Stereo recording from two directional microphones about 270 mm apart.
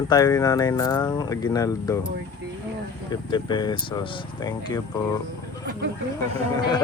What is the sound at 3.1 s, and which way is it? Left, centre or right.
Speech, centre.